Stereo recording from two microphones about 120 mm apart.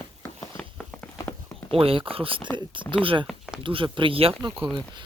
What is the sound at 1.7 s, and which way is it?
Speech, 50° right (ahead or behind).